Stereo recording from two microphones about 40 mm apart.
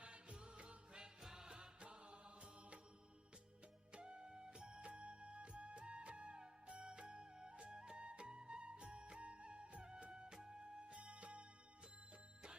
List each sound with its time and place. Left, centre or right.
0.0 s music: right
1.2 s music: centre; by 2.8 s right
3.9 s music: right